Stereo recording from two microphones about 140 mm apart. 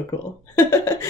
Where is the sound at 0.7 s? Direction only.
15° left (ahead or behind).